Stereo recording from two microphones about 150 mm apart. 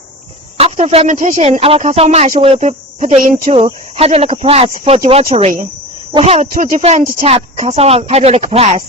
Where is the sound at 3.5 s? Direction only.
40° right (ahead or behind).